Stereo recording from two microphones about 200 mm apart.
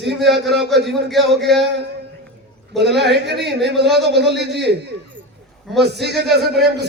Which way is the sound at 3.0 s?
55° right (ahead or behind).